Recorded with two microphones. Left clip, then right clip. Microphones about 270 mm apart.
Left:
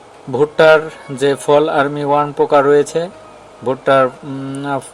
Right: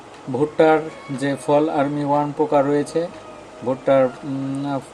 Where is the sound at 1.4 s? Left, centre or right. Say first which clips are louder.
Left 4 dB; left.